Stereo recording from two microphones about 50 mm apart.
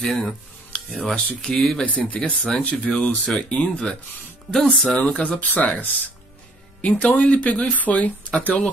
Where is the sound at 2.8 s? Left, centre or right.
Centre.